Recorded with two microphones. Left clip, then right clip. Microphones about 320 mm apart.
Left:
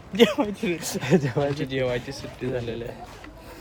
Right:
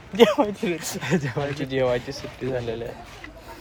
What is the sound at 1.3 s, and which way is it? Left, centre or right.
Speech, centre.